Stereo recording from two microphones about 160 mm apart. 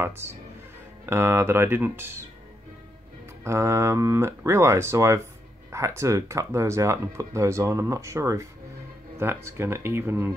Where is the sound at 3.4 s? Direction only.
15° right (ahead or behind).